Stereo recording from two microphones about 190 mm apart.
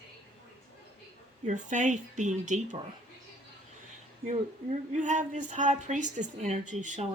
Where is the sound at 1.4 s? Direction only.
40° right (ahead or behind).